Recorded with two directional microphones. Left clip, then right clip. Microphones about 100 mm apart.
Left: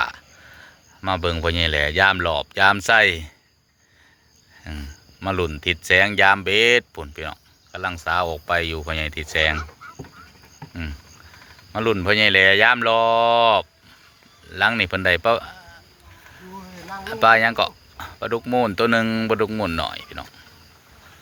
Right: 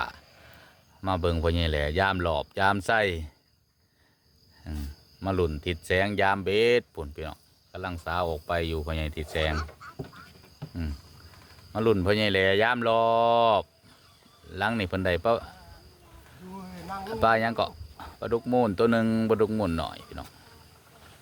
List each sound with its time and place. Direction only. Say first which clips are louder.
1.0 s speech: left 5 dB; 20° right (ahead or behind)
4.7 s speech: left 5 dB; 15° right (ahead or behind)
11.7 s speech: left 5 dB; 25° right (ahead or behind)
17.0 s speech: left 9 dB; 15° right (ahead or behind)